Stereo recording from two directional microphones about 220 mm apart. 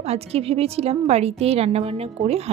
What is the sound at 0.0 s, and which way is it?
Speech, 30° right (ahead or behind).